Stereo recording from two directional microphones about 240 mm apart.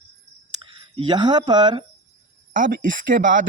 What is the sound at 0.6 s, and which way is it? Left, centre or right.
Speech, right.